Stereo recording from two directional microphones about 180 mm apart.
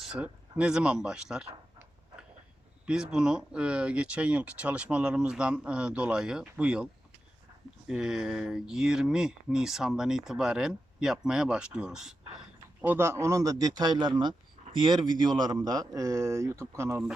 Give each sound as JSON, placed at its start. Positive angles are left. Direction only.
{"t": 0.0, "sound": "speech", "side_deg": -5}
{"t": 2.8, "sound": "speech", "side_deg": -5}
{"t": 7.9, "sound": "speech", "side_deg": -5}